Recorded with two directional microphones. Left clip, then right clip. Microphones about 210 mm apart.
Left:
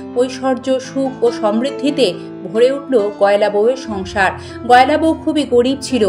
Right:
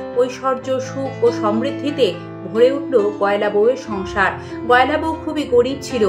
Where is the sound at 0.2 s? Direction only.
35° left (ahead or behind).